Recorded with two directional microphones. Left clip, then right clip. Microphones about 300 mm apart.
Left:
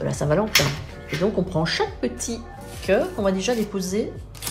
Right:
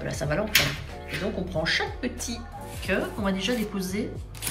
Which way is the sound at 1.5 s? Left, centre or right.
Left.